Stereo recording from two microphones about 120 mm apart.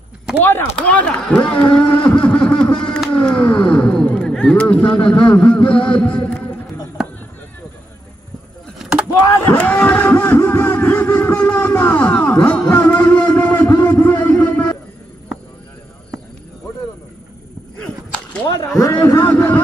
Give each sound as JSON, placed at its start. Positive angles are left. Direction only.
{"t": 0.4, "sound": "music", "side_deg": 20}
{"t": 0.7, "sound": "speech", "side_deg": 10}
{"t": 5.0, "sound": "music", "side_deg": 10}
{"t": 7.0, "sound": "chop", "side_deg": -5}
{"t": 8.7, "sound": "vehicle", "side_deg": -5}
{"t": 9.6, "sound": "a sound", "side_deg": 15}
{"t": 13.7, "sound": "music", "side_deg": 25}
{"t": 18.6, "sound": "a sound", "side_deg": 30}
{"t": 19.2, "sound": "a sound", "side_deg": 15}